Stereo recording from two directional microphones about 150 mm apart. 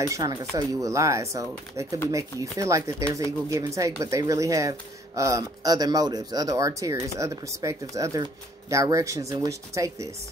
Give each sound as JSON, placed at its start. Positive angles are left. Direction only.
{"t": 0.0, "sound": "speech", "side_deg": -25}